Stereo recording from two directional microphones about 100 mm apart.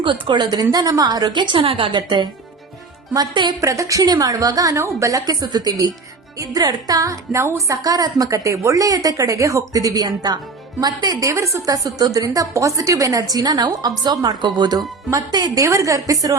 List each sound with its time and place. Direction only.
0.0 s a woman's voice: 55° right (ahead or behind)
3.6 s a woman's voice: 35° right (ahead or behind)
15.6 s a woman's voice: 30° right (ahead or behind)